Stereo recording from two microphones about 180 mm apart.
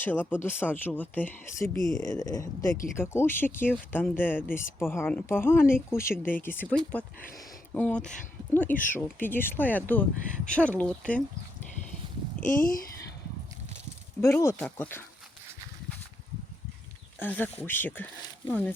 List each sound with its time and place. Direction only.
0.0 s speech: 10° left (ahead or behind)
12.5 s speech: 50° left (ahead or behind)
14.2 s speech: 15° left (ahead or behind)
17.2 s speech: 10° left (ahead or behind)